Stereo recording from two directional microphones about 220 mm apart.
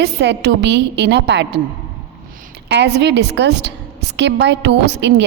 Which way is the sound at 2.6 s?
50° right (ahead or behind).